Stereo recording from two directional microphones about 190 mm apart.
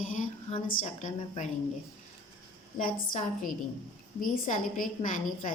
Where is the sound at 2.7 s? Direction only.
45° left (ahead or behind).